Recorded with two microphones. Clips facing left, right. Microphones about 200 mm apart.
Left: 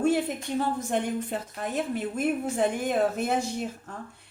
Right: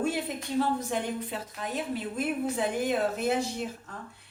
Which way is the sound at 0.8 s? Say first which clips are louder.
Left 3 dB; 50° left (ahead or behind).